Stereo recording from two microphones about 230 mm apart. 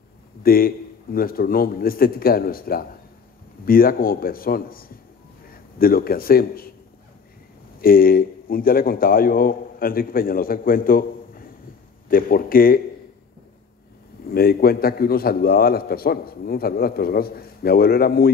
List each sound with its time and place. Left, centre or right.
0.4 s a man's voice: left
7.8 s a man's voice: left
14.2 s a man's voice: left